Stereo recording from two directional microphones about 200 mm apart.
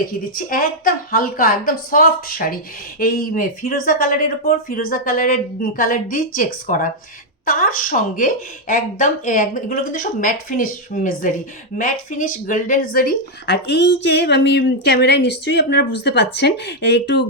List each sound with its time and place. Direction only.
0.1 s speech: 45° left (ahead or behind)